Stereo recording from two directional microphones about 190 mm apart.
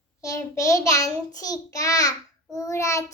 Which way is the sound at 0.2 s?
15° left (ahead or behind).